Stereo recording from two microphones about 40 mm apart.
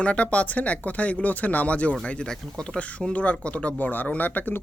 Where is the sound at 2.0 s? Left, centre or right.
Centre.